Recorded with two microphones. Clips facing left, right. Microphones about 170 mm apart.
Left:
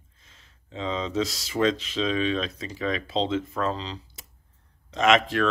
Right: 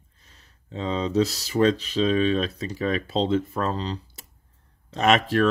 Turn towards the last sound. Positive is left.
turn(degrees=-40)  # may be behind; listen again after turning